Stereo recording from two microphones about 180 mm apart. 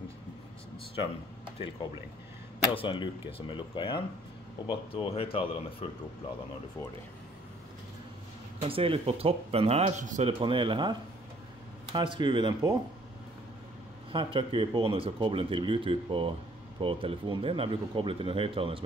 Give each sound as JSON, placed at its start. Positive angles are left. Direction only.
{"t": 2.7, "sound": "speech", "side_deg": 30}
{"t": 8.5, "sound": "speech", "side_deg": -30}
{"t": 10.4, "sound": "speech", "side_deg": -30}
{"t": 14.1, "sound": "speech", "side_deg": -30}